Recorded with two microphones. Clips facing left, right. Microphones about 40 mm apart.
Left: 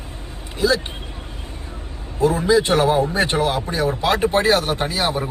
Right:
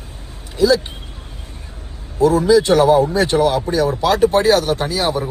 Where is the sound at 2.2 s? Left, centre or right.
Left.